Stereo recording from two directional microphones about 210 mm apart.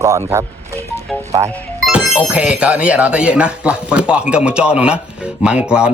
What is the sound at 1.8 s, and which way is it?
Speech, 5° right (ahead or behind).